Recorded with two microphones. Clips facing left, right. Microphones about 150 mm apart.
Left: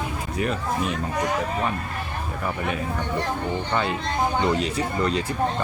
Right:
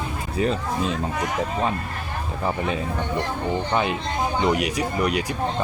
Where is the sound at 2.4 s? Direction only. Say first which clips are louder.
Right 3 dB; 25° right (ahead or behind).